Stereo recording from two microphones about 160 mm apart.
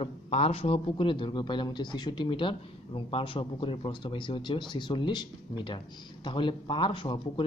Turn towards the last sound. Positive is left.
turn(degrees=30)  # may be behind; listen again after turning